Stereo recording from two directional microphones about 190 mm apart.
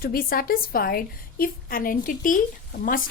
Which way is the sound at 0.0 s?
50° left (ahead or behind).